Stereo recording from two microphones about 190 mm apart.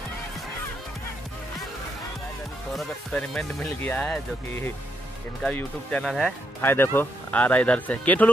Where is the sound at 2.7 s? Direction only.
Centre (ahead or behind).